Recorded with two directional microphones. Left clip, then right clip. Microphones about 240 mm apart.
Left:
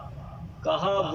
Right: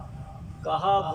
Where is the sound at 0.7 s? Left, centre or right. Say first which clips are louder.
Right 3 dB; left.